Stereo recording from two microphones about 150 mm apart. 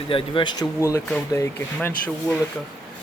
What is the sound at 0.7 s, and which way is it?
Speech, 20° left (ahead or behind).